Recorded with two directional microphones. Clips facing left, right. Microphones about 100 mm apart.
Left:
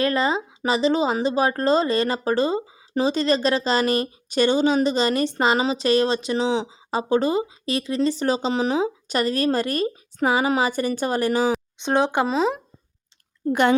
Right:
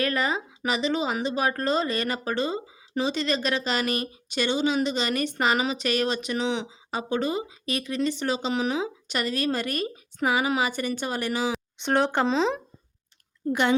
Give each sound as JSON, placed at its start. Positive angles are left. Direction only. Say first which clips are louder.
{"t": 0.0, "sound": "speech", "louder": "left 5 dB", "side_deg": 30}
{"t": 11.8, "sound": "speech", "louder": "left 1 dB", "side_deg": 20}
{"t": 13.5, "sound": "a woman's voice", "louder": "left 5 dB", "side_deg": 45}